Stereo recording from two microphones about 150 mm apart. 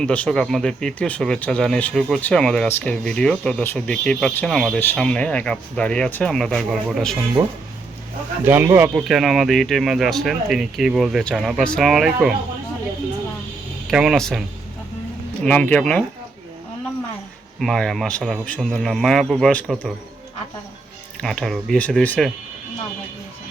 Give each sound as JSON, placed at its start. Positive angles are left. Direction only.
{"t": 0.0, "sound": "speech", "side_deg": 10}
{"t": 7.4, "sound": "speech", "side_deg": -20}
{"t": 13.9, "sound": "speech", "side_deg": -5}
{"t": 15.4, "sound": "speech", "side_deg": 10}
{"t": 17.6, "sound": "speech", "side_deg": 0}
{"t": 21.2, "sound": "speech", "side_deg": 5}